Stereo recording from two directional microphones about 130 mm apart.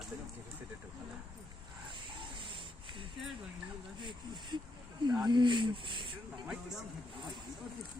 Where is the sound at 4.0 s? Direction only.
35° right (ahead or behind).